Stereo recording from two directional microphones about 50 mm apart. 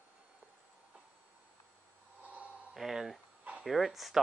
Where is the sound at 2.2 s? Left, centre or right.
Right.